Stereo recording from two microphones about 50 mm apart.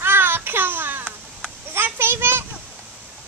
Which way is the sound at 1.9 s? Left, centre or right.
Right.